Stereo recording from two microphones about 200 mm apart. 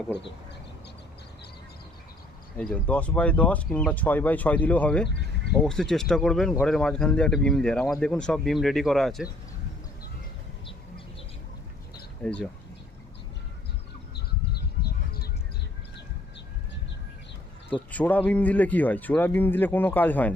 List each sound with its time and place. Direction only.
2.6 s speech: 5° left (ahead or behind)
12.2 s speech: 5° left (ahead or behind)
14.2 s bird: 55° left (ahead or behind)
17.9 s speech: 10° left (ahead or behind)